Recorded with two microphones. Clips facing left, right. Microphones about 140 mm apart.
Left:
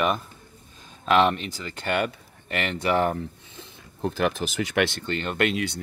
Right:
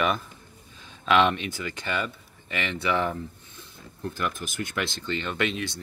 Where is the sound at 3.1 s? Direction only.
85° left; by 5.1 s 65° left (ahead or behind).